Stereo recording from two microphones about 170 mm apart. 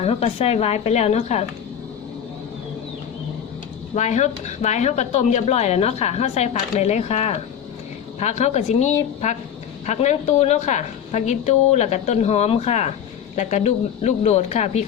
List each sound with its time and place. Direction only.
0.0 s speech: 35° left (ahead or behind)
3.9 s a woman's voice: 40° left (ahead or behind)